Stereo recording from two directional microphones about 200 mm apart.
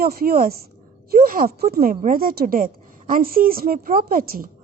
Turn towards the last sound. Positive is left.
turn(degrees=-45)  # may be behind; listen again after turning